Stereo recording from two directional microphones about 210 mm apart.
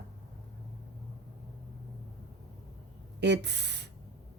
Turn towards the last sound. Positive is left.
turn(degrees=-55)  # may be behind; listen again after turning